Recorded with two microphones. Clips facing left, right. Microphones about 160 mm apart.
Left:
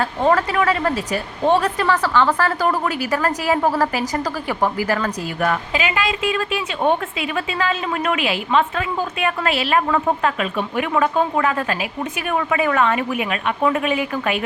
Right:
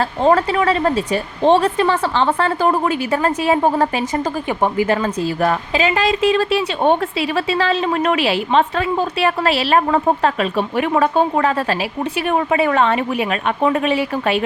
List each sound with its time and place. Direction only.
0.0 s speech: 25° right (ahead or behind)